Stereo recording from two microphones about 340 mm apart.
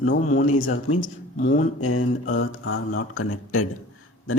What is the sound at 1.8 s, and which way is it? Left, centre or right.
Speech, left.